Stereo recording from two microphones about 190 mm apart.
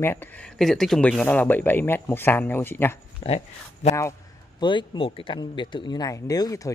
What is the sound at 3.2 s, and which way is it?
Speech, 35° left (ahead or behind).